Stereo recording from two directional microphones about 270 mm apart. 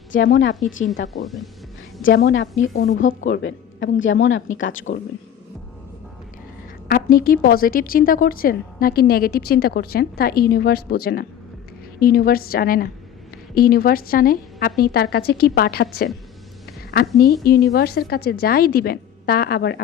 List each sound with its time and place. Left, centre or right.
0.1 s speech: left
2.0 s speech: left
6.8 s a woman's voice: left
17.2 s a woman's voice: left